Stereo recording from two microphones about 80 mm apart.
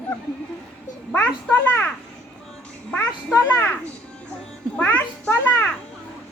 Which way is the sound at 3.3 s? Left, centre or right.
Left.